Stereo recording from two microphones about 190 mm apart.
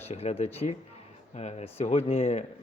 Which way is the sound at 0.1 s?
35° left (ahead or behind).